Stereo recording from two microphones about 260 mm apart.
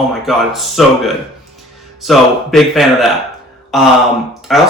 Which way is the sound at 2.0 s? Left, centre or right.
Centre.